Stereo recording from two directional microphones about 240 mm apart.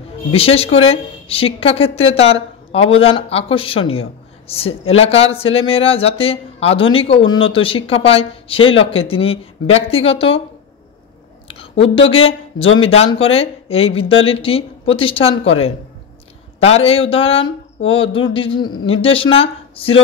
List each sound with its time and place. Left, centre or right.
0.3 s a woman's voice: left
12.1 s a woman's voice: left